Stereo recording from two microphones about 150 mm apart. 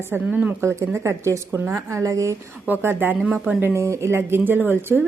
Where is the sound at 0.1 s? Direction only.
10° right (ahead or behind).